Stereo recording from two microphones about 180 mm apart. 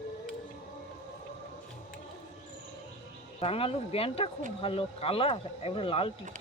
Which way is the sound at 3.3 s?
30° left (ahead or behind).